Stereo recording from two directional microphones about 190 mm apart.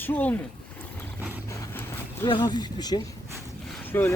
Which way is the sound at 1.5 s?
15° left (ahead or behind).